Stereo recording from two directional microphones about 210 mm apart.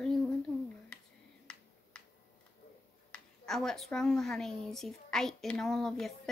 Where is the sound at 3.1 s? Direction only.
Centre (ahead or behind).